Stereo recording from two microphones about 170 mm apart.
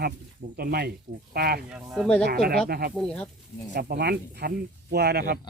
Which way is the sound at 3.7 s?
70° right (ahead or behind).